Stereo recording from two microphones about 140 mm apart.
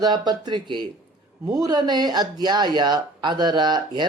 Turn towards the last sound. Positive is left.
turn(degrees=-30)  # may be behind; listen again after turning